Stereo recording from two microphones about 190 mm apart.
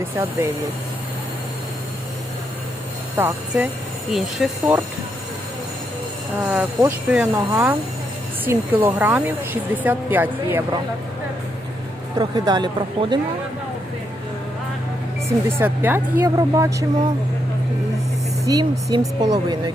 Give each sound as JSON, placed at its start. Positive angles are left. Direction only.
{"t": 0.0, "sound": "speech", "side_deg": -15}
{"t": 3.2, "sound": "speech", "side_deg": -10}
{"t": 6.5, "sound": "speech", "side_deg": -10}
{"t": 8.8, "sound": "speech", "side_deg": -10}
{"t": 12.2, "sound": "speech", "side_deg": -20}
{"t": 15.4, "sound": "speech", "side_deg": -10}
{"t": 18.4, "sound": "speech", "side_deg": -20}